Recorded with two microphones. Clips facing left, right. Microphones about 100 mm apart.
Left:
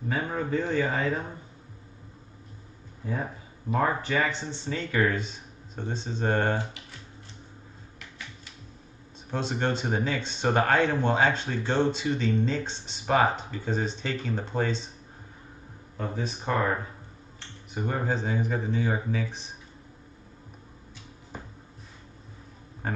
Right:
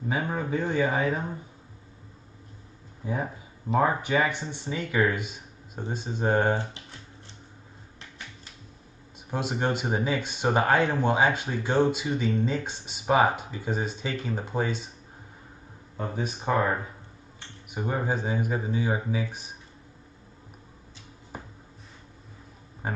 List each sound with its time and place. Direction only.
0.1 s speech: 15° right (ahead or behind)
3.7 s speech: 20° right (ahead or behind)
9.3 s speech: 10° right (ahead or behind)
16.0 s speech: 15° right (ahead or behind)
17.6 s speech: 15° right (ahead or behind)
22.8 s speech: 10° right (ahead or behind)